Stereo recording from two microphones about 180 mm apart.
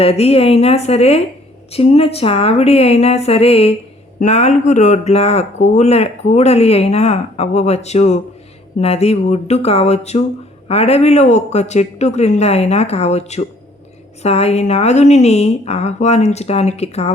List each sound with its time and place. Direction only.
0.0 s speech: 35° left (ahead or behind)